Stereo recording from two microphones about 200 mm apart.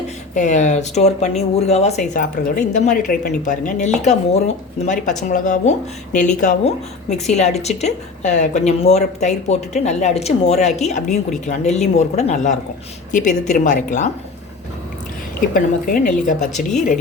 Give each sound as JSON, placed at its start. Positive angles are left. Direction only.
{"t": 0.3, "sound": "a woman's voice", "side_deg": 35}
{"t": 15.4, "sound": "a woman's voice", "side_deg": 45}